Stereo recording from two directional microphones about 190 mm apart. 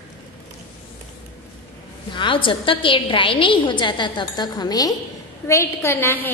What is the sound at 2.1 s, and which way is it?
A woman's voice, 25° left (ahead or behind).